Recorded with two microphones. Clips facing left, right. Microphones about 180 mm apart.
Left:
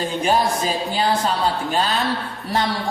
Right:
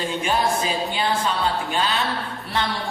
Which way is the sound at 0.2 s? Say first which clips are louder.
Left 4 dB; 40° left (ahead or behind).